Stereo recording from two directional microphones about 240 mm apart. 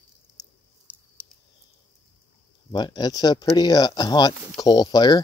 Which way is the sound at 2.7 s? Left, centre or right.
Centre.